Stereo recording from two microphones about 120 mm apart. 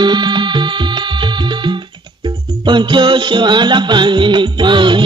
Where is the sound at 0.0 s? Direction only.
40° right (ahead or behind).